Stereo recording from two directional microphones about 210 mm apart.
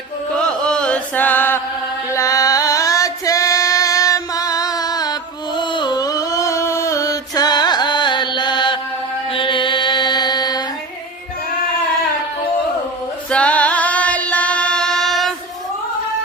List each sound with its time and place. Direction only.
0.3 s chant: 5° left (ahead or behind)
2.0 s female singing: 15° left (ahead or behind)
5.5 s a sound: 20° left (ahead or behind)
9.3 s mantra: 25° left (ahead or behind)
13.3 s singing: 5° left (ahead or behind)